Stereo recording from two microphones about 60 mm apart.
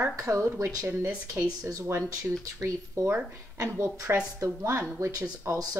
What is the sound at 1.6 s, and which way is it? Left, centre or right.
A woman's voice, right.